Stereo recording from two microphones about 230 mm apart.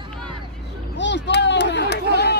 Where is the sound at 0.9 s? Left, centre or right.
Left.